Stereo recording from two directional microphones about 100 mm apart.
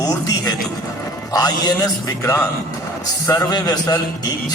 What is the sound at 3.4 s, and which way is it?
Speech, 40° left (ahead or behind).